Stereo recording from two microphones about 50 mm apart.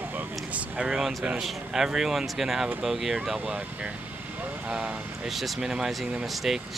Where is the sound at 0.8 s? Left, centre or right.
Centre.